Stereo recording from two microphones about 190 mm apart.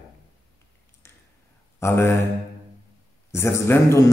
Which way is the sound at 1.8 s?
15° left (ahead or behind).